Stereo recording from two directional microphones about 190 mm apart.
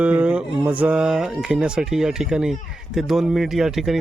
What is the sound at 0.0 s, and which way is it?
Speech, 5° right (ahead or behind).